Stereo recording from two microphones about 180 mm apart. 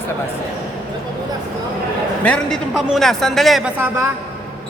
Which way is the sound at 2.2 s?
5° left (ahead or behind).